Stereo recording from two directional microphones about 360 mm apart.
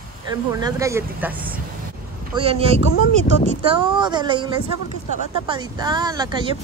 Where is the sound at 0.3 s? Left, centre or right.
Centre.